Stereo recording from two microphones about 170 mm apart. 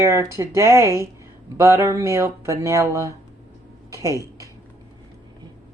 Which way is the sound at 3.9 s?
20° right (ahead or behind).